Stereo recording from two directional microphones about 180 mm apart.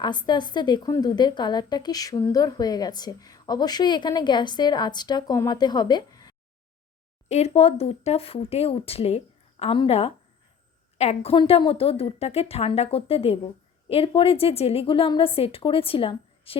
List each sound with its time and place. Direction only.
0.0 s a woman's voice: 25° left (ahead or behind)
7.3 s speech: 35° left (ahead or behind)